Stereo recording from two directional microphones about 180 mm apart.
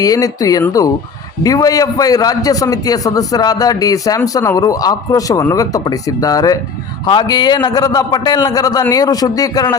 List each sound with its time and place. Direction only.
0.0 s a man's voice: 20° left (ahead or behind)